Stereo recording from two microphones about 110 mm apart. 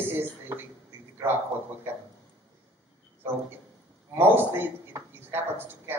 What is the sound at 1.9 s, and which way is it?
Speech, 20° right (ahead or behind).